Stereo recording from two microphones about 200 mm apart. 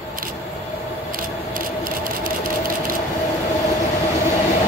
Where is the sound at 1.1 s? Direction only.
45° right (ahead or behind).